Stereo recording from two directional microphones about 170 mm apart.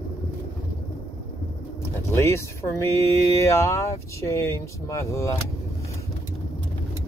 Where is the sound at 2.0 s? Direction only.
15° left (ahead or behind).